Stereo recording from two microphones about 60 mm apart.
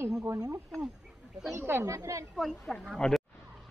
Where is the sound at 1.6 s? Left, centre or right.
Right.